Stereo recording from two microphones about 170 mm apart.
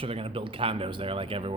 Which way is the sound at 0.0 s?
35° right (ahead or behind).